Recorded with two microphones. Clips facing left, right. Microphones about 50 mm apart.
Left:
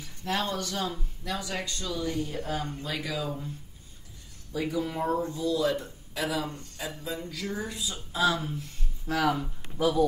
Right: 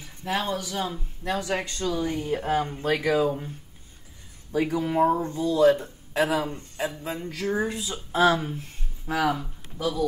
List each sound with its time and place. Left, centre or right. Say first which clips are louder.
0.0 s speech: right 2 dB; centre
1.2 s speech: right 6 dB; right
2.8 s speech: right 10 dB; right
9.0 s speech: right 2 dB; centre